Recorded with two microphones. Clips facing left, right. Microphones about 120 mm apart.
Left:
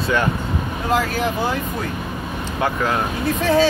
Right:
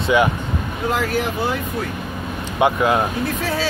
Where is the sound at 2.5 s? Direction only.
15° right (ahead or behind).